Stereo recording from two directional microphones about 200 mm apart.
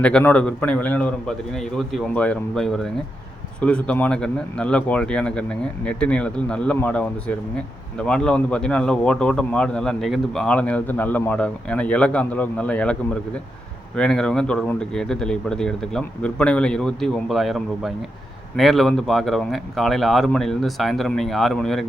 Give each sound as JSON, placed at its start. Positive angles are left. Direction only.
{"t": 0.0, "sound": "speech", "side_deg": 5}